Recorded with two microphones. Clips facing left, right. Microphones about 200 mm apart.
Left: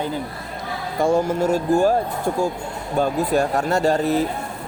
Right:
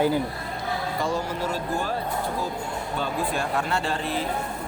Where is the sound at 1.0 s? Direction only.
50° left (ahead or behind).